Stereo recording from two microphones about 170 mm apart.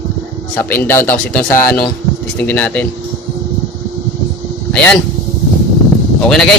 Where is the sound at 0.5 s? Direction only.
10° left (ahead or behind).